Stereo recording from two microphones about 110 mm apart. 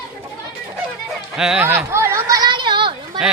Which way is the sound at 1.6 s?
20° right (ahead or behind).